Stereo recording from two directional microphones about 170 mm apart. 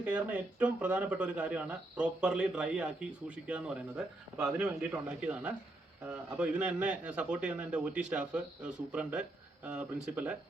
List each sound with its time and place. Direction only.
0.0 s speech: 10° right (ahead or behind)